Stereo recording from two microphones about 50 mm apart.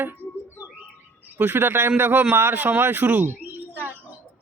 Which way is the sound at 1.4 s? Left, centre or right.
Right.